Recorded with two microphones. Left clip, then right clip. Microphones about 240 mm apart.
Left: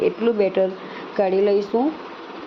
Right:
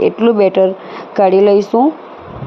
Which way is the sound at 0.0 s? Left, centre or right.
Right.